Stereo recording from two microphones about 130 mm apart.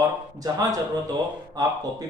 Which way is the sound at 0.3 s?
30° right (ahead or behind).